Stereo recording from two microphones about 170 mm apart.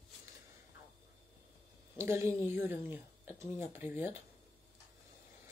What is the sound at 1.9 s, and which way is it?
Speech, 15° right (ahead or behind).